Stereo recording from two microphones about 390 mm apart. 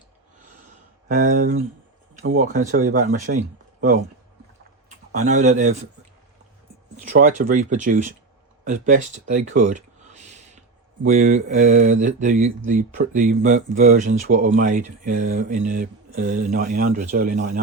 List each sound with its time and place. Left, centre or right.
1.0 s speech: centre
3.3 s a sound: centre
5.1 s speech: centre
7.1 s speech: centre